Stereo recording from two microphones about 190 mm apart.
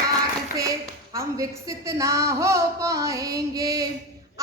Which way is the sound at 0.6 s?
15° right (ahead or behind).